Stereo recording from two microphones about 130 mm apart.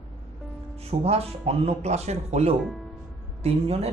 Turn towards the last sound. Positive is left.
turn(degrees=-55)  # may be behind; listen again after turning